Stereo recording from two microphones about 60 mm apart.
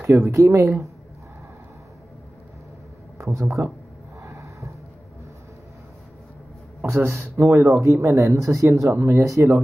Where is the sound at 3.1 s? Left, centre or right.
Right.